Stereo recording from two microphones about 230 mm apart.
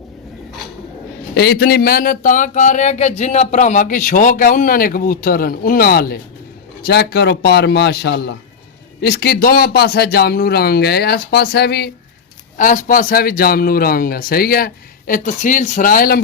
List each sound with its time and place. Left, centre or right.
1.4 s speech: left